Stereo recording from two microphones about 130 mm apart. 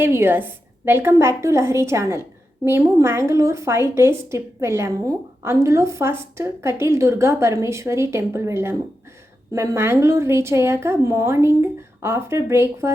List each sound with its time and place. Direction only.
0.0 s a woman's voice: 15° right (ahead or behind)